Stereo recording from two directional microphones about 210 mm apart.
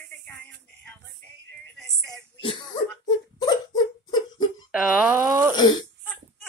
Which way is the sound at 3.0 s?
20° left (ahead or behind).